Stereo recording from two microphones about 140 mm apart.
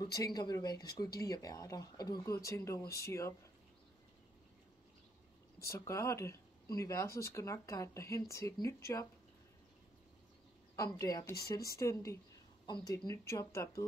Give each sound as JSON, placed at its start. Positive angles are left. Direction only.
{"t": 0.0, "sound": "speech", "side_deg": 25}
{"t": 5.6, "sound": "speech", "side_deg": 20}
{"t": 10.8, "sound": "speech", "side_deg": 25}